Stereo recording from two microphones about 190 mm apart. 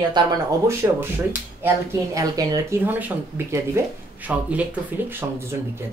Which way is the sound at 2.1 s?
20° right (ahead or behind).